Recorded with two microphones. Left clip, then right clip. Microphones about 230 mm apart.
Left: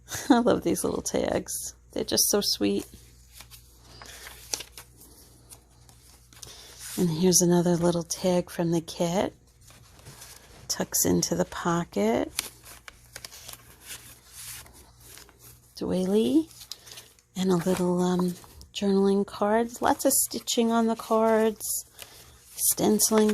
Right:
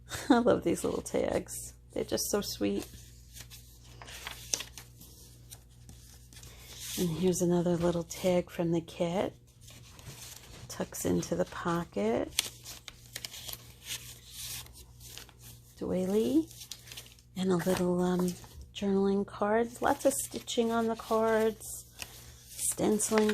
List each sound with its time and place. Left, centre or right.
0.1 s speech: left
4.0 s a sound: centre
7.1 s speech: left
10.7 s speech: left
12.4 s shuffling cards: centre
15.8 s speech: left
17.6 s speech: centre
17.8 s speech: left
22.8 s speech: left